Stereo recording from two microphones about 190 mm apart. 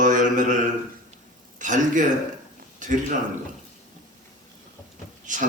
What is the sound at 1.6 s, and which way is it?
Speech, 40° right (ahead or behind).